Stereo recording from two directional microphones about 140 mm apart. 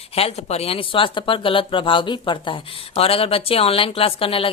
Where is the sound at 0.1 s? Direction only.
45° left (ahead or behind).